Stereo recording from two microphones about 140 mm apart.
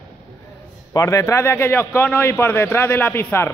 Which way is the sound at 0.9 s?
25° left (ahead or behind).